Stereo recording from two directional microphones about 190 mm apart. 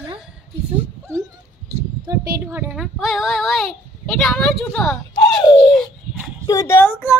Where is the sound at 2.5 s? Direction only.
5° right (ahead or behind).